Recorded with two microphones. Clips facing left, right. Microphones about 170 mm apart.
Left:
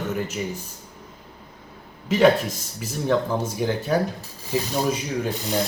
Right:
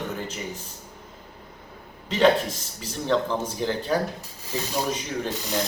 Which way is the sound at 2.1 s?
10° left (ahead or behind).